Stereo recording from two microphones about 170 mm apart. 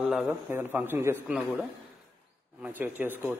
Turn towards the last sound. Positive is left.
turn(degrees=-10)  # may be behind; listen again after turning